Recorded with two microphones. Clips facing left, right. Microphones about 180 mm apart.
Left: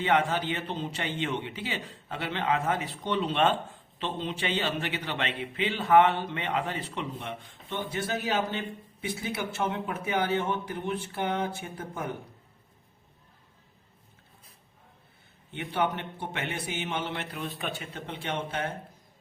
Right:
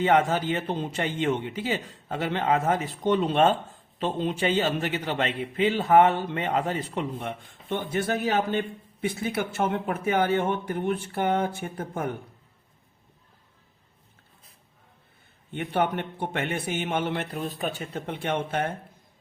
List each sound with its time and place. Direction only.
0.0 s a man's voice: 45° right (ahead or behind)
15.5 s a man's voice: 50° right (ahead or behind)